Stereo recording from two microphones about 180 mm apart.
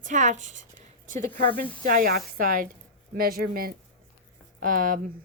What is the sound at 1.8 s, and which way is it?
Speech, 55° right (ahead or behind).